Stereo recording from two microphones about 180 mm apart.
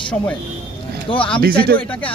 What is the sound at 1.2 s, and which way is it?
Speech, 5° left (ahead or behind).